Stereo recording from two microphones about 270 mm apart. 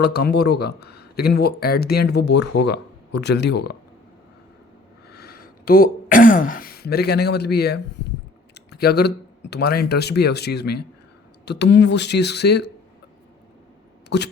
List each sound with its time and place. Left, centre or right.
0.0 s speech: left
5.1 s speech: left
14.1 s speech: left